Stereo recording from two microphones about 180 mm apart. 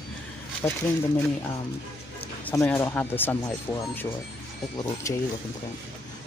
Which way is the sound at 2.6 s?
10° left (ahead or behind).